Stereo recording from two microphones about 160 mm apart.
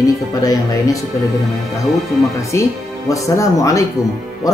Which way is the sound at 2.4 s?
20° left (ahead or behind).